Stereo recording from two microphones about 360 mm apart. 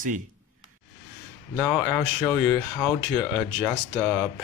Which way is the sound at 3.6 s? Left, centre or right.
Centre.